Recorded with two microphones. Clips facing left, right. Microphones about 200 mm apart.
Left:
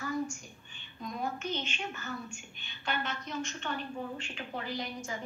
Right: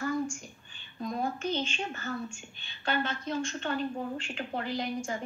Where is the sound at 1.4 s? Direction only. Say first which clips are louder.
Right 5 dB; 30° right (ahead or behind).